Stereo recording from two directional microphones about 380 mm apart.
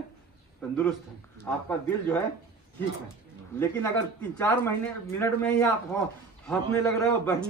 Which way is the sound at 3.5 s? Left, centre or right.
Centre.